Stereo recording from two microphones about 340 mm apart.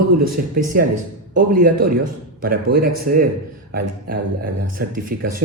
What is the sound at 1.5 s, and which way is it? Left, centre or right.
Speech, right.